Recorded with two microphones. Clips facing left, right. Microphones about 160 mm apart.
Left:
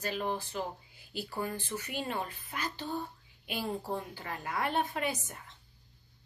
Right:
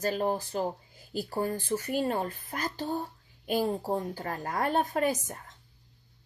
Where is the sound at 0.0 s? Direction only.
40° right (ahead or behind).